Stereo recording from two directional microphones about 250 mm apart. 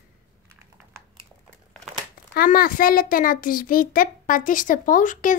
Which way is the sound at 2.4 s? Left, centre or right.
Left.